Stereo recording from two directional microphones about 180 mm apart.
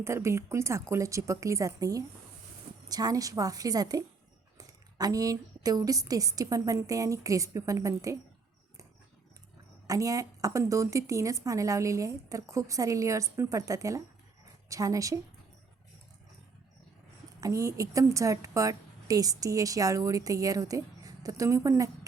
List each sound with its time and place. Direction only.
0.0 s a woman's voice: 15° right (ahead or behind)
9.8 s a woman's voice: 20° right (ahead or behind)
17.4 s a woman's voice: 15° right (ahead or behind)